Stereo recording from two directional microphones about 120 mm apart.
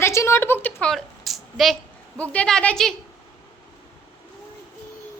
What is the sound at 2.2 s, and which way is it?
Speech, 10° left (ahead or behind).